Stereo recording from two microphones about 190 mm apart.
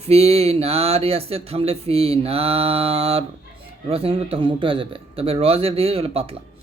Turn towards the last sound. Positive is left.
turn(degrees=-30)  # may be behind; listen again after turning